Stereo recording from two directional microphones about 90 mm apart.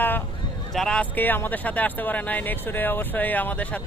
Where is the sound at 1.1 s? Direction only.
20° left (ahead or behind).